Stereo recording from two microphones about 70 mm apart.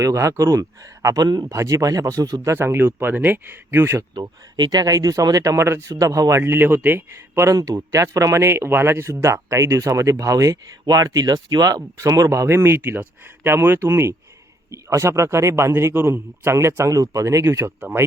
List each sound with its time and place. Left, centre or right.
0.0 s a man's voice: right
1.0 s speech: right
1.5 s speech: right
2.4 s speech: right
4.1 s a man's voice: right
6.4 s speech: right
7.4 s a man's voice: right
10.8 s a man's voice: right
17.8 s speech: right